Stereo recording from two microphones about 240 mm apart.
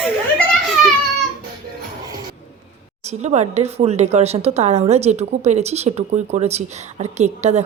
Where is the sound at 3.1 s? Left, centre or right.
Right.